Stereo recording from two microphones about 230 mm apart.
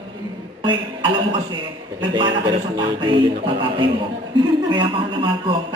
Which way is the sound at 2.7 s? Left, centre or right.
Right.